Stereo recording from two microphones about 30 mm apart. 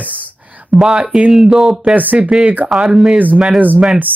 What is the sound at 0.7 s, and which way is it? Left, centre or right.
Speech, centre.